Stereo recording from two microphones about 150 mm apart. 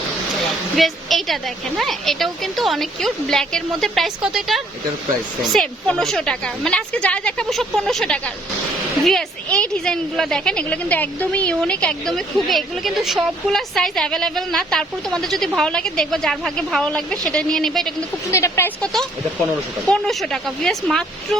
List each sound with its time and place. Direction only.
0.8 s a woman's voice: centre (ahead or behind)
18.3 s speech: 20° left (ahead or behind)
19.9 s a woman's voice: 5° left (ahead or behind)